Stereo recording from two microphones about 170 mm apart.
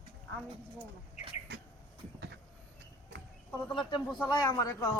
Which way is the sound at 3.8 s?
25° left (ahead or behind).